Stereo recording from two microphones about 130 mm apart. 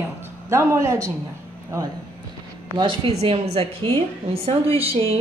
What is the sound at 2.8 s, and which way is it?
A woman's voice, 45° right (ahead or behind).